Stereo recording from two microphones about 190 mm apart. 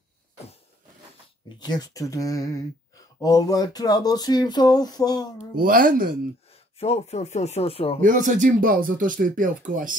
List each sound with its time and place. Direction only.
1.6 s speech: 20° left (ahead or behind)
5.6 s speech: 50° right (ahead or behind)
6.8 s speech: 35° left (ahead or behind)
8.0 s speech: 45° right (ahead or behind)